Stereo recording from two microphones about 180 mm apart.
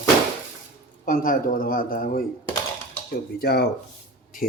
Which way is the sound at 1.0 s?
50° left (ahead or behind).